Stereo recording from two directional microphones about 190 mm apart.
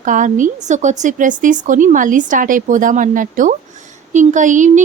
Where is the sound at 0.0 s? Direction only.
45° right (ahead or behind).